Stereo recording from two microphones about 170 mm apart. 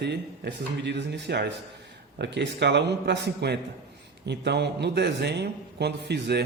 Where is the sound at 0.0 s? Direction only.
80° right.